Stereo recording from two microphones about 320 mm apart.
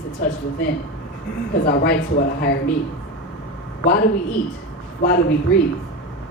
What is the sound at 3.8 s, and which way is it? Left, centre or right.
Speech, left.